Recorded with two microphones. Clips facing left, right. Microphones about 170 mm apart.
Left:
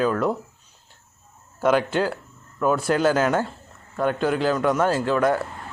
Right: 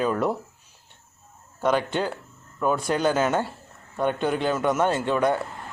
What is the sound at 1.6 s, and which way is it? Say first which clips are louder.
Speech: left 3 dB; 5° left (ahead or behind).